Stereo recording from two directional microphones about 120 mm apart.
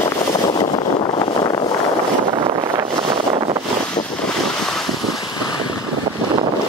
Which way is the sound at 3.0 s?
50° right (ahead or behind).